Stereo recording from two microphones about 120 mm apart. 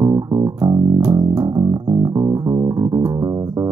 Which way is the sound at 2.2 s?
35° right (ahead or behind).